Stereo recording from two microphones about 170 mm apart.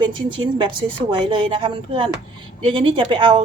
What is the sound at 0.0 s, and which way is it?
A woman's voice, 30° right (ahead or behind).